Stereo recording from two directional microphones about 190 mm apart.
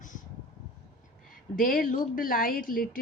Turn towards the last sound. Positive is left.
turn(degrees=45)  # may be behind; listen again after turning